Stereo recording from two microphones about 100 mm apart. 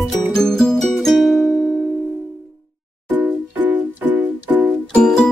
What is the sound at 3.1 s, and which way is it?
Music, 15° right (ahead or behind).